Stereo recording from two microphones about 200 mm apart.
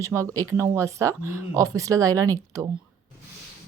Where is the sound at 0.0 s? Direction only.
15° right (ahead or behind).